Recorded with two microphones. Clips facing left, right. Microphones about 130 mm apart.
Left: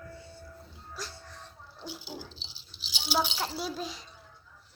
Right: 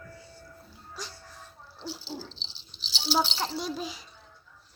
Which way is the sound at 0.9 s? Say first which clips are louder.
Even; centre (ahead or behind).